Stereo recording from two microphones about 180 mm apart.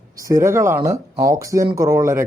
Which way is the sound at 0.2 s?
15° right (ahead or behind).